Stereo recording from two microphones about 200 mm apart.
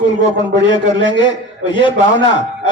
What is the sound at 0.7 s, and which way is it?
Speech, 25° left (ahead or behind).